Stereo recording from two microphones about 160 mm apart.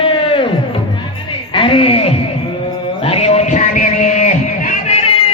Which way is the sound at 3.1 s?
40° left (ahead or behind).